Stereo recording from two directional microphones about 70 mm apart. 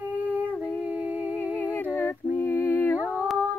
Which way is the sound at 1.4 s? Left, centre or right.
Left.